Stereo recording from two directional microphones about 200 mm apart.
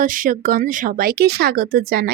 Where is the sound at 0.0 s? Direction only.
45° right (ahead or behind).